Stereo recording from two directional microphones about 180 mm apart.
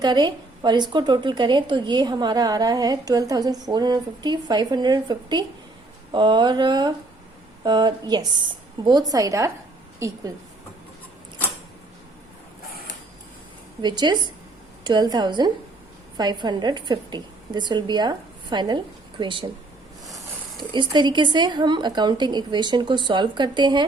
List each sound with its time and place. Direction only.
0.0 s a woman's voice: 25° right (ahead or behind)
13.8 s a woman's voice: 25° right (ahead or behind)
20.7 s a woman's voice: 25° right (ahead or behind)